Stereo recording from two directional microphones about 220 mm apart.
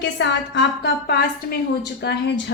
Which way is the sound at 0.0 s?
55° left (ahead or behind).